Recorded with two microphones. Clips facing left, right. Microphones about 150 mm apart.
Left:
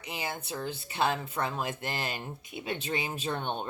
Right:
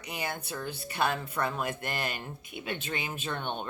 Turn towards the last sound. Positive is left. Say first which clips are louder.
# left 2 dB
turn(degrees=35)  # may be behind; listen again after turning